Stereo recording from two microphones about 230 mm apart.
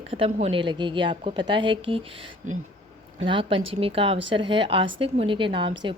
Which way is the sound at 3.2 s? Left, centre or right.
Right.